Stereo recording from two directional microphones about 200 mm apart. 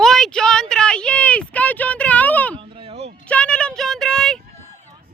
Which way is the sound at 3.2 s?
5° left (ahead or behind).